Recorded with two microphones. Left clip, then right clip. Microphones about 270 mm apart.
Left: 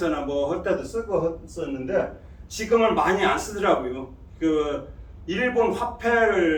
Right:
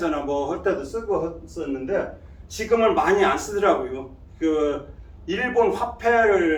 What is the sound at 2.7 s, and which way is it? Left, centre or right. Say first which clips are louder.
Speech: right 1 dB; centre.